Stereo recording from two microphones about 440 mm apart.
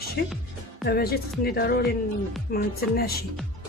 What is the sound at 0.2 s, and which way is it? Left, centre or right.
Speech, left.